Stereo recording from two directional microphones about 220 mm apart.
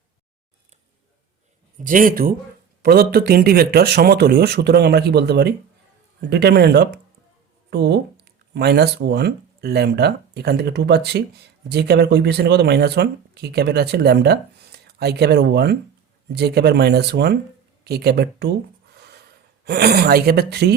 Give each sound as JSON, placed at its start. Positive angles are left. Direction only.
{"t": 1.9, "sound": "speech", "side_deg": -40}